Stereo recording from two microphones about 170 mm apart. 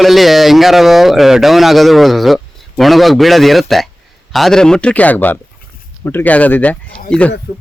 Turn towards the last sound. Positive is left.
turn(degrees=5)  # may be behind; listen again after turning